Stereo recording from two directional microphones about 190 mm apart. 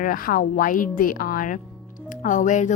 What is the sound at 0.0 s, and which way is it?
Speech, 50° left (ahead or behind).